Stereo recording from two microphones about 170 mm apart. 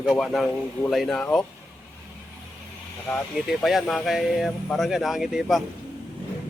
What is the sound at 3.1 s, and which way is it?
Speech, centre (ahead or behind).